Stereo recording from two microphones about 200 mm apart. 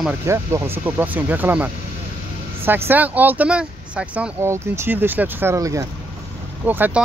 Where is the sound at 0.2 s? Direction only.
15° right (ahead or behind).